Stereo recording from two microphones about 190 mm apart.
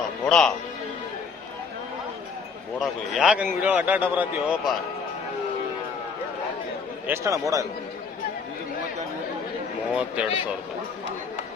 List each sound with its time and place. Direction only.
0.3 s a man's voice: 5° left (ahead or behind)
3.2 s a man's voice: 5° right (ahead or behind)
7.1 s a man's voice: 15° right (ahead or behind)
9.9 s a man's voice: 5° right (ahead or behind)